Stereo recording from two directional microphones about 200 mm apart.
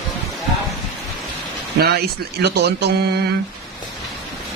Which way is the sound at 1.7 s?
50° right (ahead or behind).